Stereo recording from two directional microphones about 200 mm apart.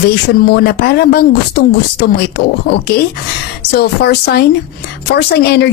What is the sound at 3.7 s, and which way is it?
Speech, 55° left (ahead or behind).